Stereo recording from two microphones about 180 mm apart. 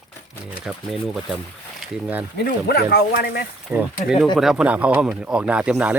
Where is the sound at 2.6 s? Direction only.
65° left (ahead or behind).